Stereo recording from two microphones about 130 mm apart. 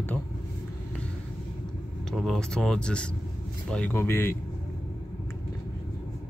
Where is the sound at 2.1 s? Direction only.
Centre (ahead or behind); by 4.4 s 15° left (ahead or behind).